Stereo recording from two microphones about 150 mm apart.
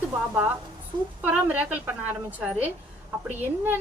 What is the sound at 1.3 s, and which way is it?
A woman's voice, 10° right (ahead or behind).